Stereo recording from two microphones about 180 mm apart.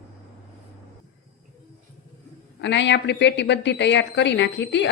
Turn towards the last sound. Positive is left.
turn(degrees=75)  # may be behind; listen again after turning